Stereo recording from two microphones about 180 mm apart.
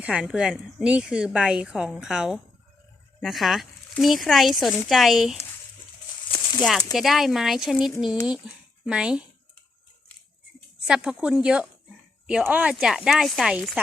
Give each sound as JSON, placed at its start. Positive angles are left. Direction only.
{"t": 0.0, "sound": "speech", "side_deg": -5}
{"t": 6.6, "sound": "speech", "side_deg": 0}
{"t": 10.8, "sound": "speech", "side_deg": -5}